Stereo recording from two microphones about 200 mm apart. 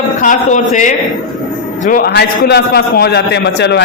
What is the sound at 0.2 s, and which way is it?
A man's voice, 40° left (ahead or behind).